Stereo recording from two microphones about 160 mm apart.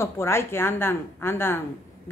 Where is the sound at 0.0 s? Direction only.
15° left (ahead or behind).